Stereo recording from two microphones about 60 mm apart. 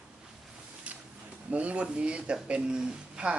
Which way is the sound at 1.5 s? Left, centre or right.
Right.